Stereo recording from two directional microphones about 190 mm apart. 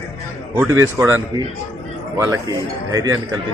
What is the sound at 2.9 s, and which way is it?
Speech, 20° right (ahead or behind).